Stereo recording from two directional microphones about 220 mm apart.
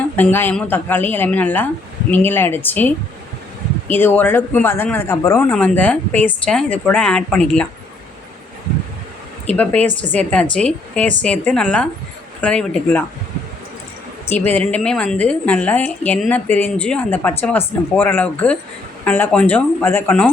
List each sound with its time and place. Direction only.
0.2 s speech: 10° left (ahead or behind)
10.1 s a woman's voice: 5° left (ahead or behind)
14.3 s speech: 5° left (ahead or behind)